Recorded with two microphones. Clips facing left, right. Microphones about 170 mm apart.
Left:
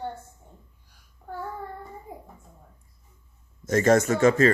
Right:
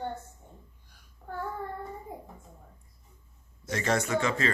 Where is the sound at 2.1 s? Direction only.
10° left (ahead or behind).